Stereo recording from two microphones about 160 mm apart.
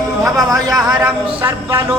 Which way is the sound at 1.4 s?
15° right (ahead or behind).